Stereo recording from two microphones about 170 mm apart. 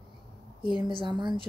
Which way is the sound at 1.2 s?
30° right (ahead or behind).